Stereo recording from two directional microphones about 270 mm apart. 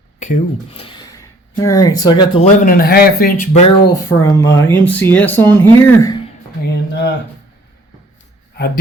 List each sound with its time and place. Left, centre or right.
0.2 s speech: left
3.5 s speech: centre
6.7 s a sound: left